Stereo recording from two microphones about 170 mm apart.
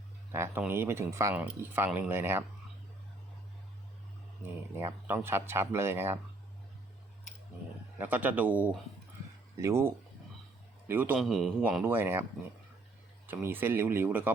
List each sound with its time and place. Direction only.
0.3 s speech: 15° right (ahead or behind)
4.7 s speech: 15° right (ahead or behind)
7.9 s a man's voice: 10° right (ahead or behind)
11.8 s speech: 15° right (ahead or behind)
13.2 s speech: 10° right (ahead or behind)